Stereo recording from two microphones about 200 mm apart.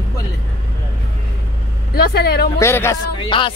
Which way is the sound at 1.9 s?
50° left (ahead or behind).